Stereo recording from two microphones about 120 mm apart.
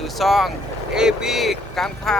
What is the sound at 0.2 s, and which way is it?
Speech, centre (ahead or behind).